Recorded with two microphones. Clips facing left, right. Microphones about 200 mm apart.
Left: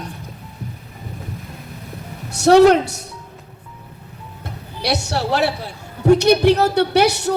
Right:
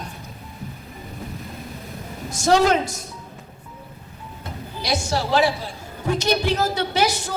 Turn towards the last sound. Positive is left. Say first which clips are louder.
# left 6 dB
turn(degrees=70)  # may be behind; listen again after turning